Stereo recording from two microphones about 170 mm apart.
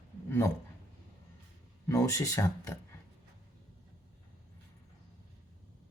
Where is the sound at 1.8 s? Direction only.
15° left (ahead or behind).